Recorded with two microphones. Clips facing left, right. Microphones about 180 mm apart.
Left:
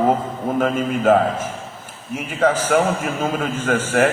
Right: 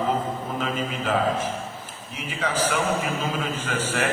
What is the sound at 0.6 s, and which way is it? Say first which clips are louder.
A man's voice: left 11 dB; 50° left (ahead or behind).